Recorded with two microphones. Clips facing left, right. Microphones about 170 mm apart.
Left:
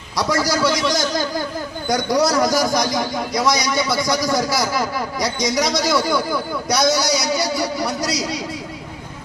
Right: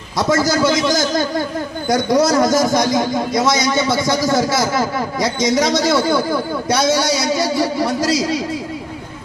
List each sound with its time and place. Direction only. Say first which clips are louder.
0.2 s a man's voice: right 4 dB; 25° right (ahead or behind)
2.1 s a man's voice: right 3 dB; 25° right (ahead or behind)